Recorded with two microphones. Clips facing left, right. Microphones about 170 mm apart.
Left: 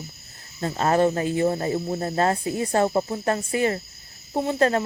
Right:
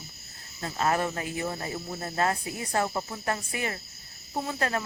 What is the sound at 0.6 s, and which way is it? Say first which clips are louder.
Cricket: left 7 dB; 30° left (ahead or behind).